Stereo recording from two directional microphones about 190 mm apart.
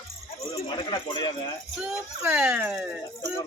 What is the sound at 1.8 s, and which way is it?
Speech, 5° right (ahead or behind).